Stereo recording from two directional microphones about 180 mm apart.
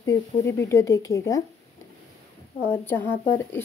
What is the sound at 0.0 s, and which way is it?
Speech, 15° left (ahead or behind).